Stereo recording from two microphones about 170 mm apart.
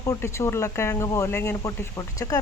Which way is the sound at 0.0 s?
15° left (ahead or behind).